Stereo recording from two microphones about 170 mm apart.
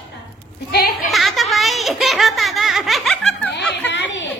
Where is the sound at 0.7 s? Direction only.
60° left (ahead or behind).